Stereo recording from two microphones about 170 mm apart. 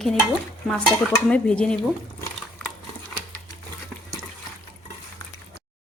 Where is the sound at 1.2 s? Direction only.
5° left (ahead or behind).